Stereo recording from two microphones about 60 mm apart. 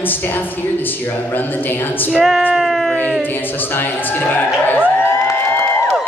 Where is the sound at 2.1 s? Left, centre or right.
Centre.